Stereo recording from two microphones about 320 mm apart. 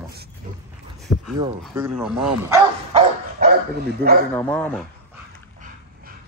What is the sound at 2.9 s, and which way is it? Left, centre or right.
Dog, right.